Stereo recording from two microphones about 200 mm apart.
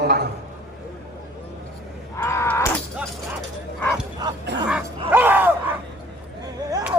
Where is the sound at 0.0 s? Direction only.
55° right (ahead or behind).